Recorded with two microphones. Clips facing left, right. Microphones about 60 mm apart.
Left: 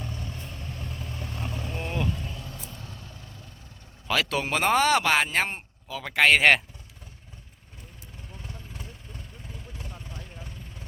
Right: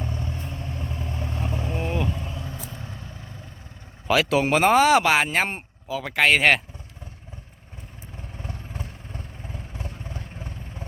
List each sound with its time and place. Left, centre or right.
0.0 s vehicle: right
4.1 s speech: centre
8.4 s vehicle: right